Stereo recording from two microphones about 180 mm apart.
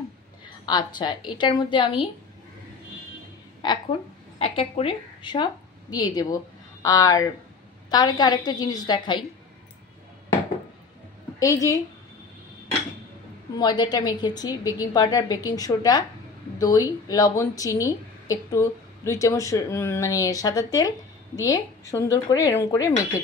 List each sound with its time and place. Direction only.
0.7 s speech: 25° left (ahead or behind)
3.6 s a woman's voice: 25° left (ahead or behind)
11.3 s a woman's voice: 20° left (ahead or behind)
13.6 s speech: 25° left (ahead or behind)